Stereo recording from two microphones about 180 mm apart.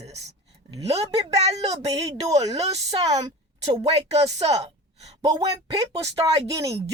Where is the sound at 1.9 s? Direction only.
20° right (ahead or behind).